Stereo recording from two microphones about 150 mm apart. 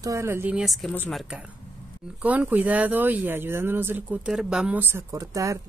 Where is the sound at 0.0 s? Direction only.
20° right (ahead or behind).